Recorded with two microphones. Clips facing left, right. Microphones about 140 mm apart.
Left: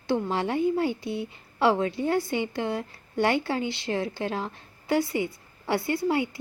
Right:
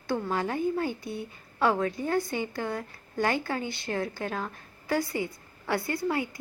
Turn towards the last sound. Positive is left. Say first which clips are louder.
# left 4 dB
turn(degrees=25)  # may be behind; listen again after turning